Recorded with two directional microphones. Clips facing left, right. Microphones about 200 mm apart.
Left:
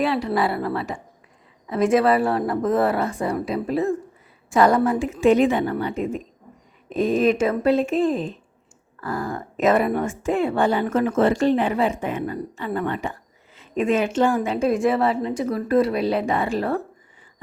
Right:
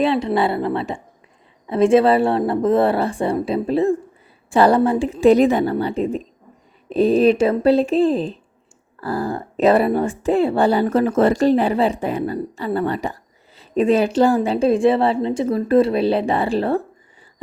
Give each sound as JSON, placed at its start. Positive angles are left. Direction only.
{"t": 0.0, "sound": "a woman's voice", "side_deg": -25}